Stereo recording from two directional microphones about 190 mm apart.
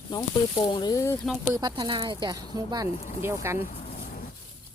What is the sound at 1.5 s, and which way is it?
Speech, 25° right (ahead or behind).